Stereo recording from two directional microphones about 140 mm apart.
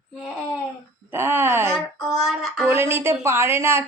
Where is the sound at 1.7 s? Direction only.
Centre (ahead or behind).